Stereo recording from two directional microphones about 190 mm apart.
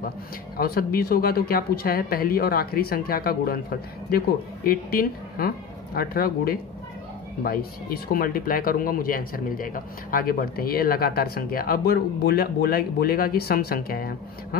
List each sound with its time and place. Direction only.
0.6 s speech: 55° left (ahead or behind)
4.6 s speech: 50° left (ahead or behind)